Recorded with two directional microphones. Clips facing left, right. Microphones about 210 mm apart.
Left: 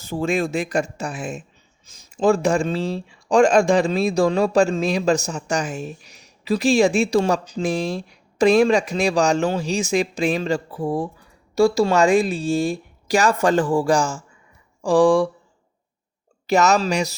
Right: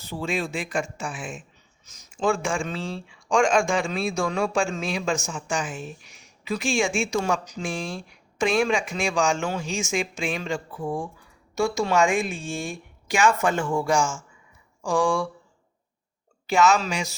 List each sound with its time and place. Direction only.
0.0 s speech: 45° left (ahead or behind)
16.5 s speech: 40° left (ahead or behind)